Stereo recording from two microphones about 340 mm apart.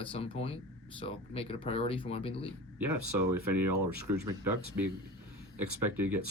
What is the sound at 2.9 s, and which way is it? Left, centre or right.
Speech, right.